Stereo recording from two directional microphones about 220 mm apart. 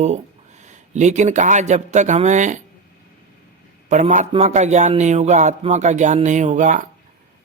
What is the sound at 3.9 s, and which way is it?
Speech, 35° right (ahead or behind).